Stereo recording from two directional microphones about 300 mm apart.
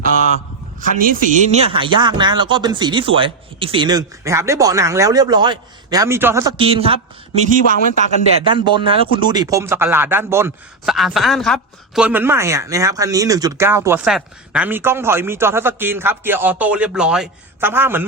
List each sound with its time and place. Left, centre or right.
0.8 s speech: right; by 18.0 s centre